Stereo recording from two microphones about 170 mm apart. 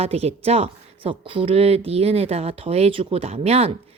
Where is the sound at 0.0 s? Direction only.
35° right (ahead or behind).